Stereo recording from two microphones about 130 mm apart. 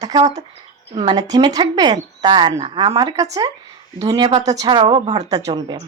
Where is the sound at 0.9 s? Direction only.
40° right (ahead or behind).